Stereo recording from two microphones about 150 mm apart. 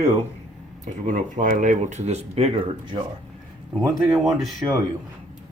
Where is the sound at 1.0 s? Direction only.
60° right (ahead or behind); by 3.1 s 35° right (ahead or behind).